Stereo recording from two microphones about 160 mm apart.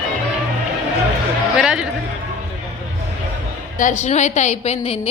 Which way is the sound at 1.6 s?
5° right (ahead or behind).